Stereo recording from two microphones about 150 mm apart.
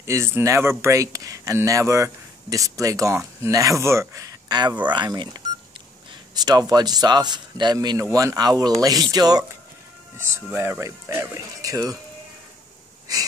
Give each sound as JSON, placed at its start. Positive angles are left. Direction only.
{"t": 0.0, "sound": "speech", "side_deg": -20}
{"t": 6.3, "sound": "speech", "side_deg": -25}
{"t": 13.1, "sound": "wheeze", "side_deg": -25}